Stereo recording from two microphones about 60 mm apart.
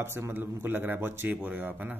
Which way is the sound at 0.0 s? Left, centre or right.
Right.